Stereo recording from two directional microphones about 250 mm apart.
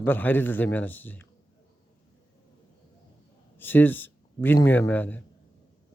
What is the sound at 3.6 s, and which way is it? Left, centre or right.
A man's voice, centre.